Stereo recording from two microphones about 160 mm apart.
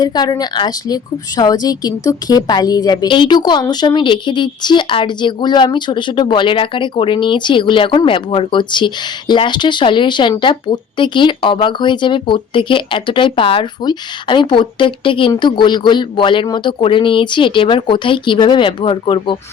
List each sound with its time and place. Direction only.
0.0 s a woman's voice: 25° left (ahead or behind)